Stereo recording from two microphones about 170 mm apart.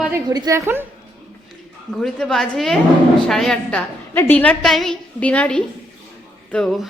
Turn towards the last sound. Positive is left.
turn(degrees=5)  # may be behind; listen again after turning